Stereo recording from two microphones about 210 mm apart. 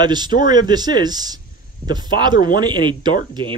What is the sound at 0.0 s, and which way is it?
Speech, 20° right (ahead or behind).